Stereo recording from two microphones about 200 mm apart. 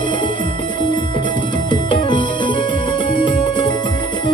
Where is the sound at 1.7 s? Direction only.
25° left (ahead or behind).